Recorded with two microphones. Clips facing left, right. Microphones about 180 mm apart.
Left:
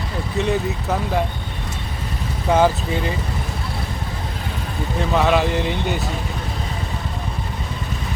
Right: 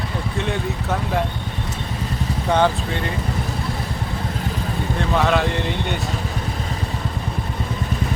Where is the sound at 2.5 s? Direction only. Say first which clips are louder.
Left 2 dB; 5° left (ahead or behind).